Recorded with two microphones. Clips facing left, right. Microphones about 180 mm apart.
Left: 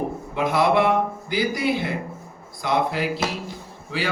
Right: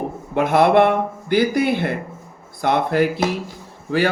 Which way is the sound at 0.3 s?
60° right (ahead or behind).